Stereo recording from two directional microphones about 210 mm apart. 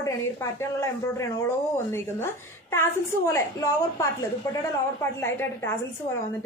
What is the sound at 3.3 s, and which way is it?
Speech, 15° left (ahead or behind).